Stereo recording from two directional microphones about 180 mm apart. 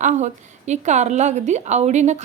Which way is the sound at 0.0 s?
45° right (ahead or behind).